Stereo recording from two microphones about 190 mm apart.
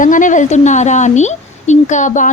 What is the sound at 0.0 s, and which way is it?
A woman's voice, 45° left (ahead or behind).